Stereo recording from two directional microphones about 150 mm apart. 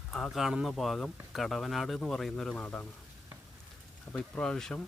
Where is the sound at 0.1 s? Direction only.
Centre (ahead or behind).